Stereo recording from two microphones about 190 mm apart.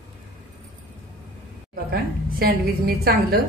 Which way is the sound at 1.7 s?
55° right (ahead or behind).